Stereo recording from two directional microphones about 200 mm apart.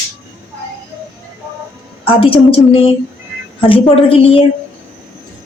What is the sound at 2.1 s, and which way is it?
A woman's voice, 25° left (ahead or behind).